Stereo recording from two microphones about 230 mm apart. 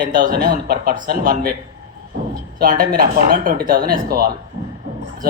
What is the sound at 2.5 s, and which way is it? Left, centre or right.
Speech, right.